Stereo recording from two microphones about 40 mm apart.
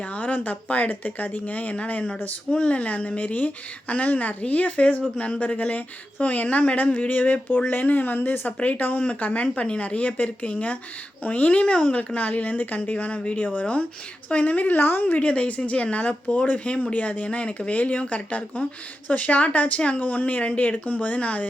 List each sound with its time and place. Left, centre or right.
0.0 s a woman's voice: left
8.5 s a woman's voice: left
14.8 s speech: left
15.2 s a woman's voice: left